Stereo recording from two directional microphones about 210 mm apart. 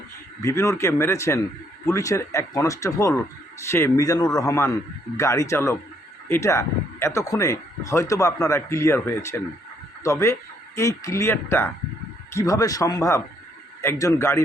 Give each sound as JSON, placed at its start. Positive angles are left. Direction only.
{"t": 0.4, "sound": "speech", "side_deg": 15}